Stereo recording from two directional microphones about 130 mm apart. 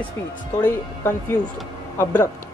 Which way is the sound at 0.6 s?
15° left (ahead or behind).